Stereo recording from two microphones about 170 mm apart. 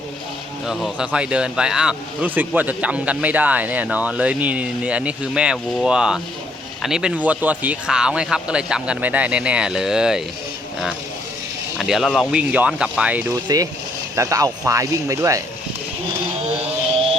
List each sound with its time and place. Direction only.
0.6 s speech: centre (ahead or behind)
11.8 s speech: centre (ahead or behind)
13.3 s speech: 20° right (ahead or behind)